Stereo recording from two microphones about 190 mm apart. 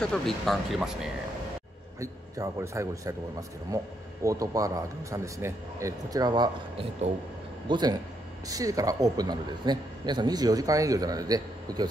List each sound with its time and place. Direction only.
0.0 s speech: centre (ahead or behind)
2.0 s speech: 15° right (ahead or behind)